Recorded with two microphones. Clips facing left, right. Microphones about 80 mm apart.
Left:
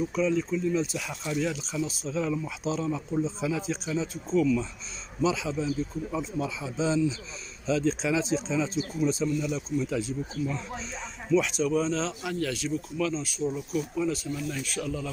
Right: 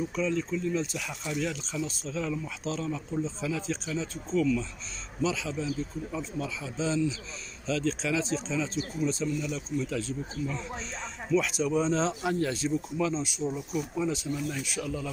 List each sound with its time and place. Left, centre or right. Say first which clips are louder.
0.1 s speech: left 3 dB; centre
11.3 s speech: left 2 dB; centre
11.7 s speech: right 1 dB; right; by 14.8 s centre
14.8 s speech: left 2 dB; centre